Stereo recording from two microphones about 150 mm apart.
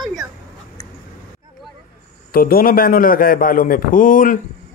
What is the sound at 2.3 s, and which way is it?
A man's voice, 75° left (ahead or behind).